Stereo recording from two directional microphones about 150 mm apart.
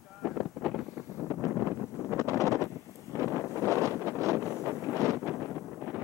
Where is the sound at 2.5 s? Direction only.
20° left (ahead or behind).